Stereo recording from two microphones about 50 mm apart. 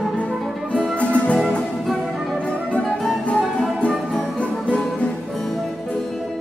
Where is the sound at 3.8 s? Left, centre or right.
Left.